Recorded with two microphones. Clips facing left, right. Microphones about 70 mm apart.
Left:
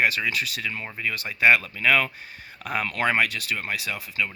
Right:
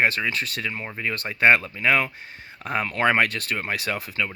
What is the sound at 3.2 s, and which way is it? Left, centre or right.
Speech, right.